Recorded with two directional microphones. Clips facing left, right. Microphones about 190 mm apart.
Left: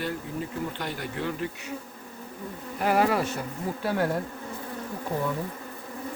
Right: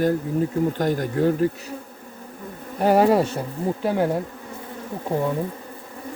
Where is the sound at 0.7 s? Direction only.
45° right (ahead or behind).